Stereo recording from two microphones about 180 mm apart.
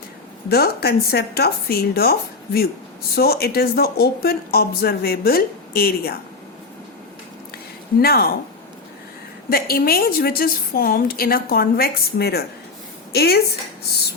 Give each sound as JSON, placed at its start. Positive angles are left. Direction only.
{"t": 0.4, "sound": "speech", "side_deg": 60}
{"t": 7.9, "sound": "speech", "side_deg": 55}
{"t": 9.5, "sound": "speech", "side_deg": 55}